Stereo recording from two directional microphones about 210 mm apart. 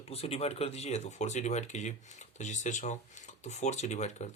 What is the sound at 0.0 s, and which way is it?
Speech, 30° left (ahead or behind).